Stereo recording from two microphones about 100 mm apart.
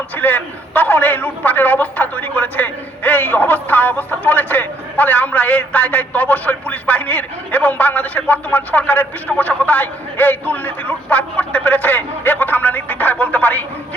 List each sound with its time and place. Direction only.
0.2 s a man's voice: 15° left (ahead or behind)